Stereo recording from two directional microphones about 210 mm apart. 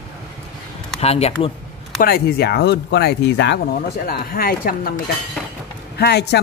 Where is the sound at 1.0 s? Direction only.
30° left (ahead or behind).